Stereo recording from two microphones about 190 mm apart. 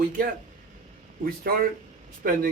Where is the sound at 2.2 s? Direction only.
50° right (ahead or behind).